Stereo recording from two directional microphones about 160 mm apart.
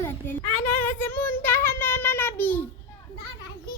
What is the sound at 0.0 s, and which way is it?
Child singing, 15° left (ahead or behind).